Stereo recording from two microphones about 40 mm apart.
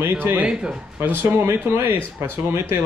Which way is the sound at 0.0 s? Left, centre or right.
Right.